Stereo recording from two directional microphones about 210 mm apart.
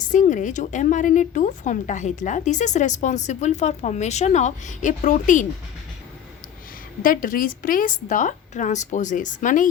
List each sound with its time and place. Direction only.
0.1 s speech: 35° left (ahead or behind)
7.0 s speech: 40° left (ahead or behind)